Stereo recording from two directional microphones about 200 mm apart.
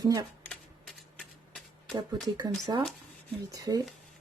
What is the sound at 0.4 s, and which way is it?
Typewriter, centre (ahead or behind).